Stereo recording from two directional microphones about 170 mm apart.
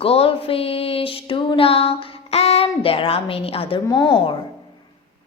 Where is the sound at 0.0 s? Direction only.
35° left (ahead or behind).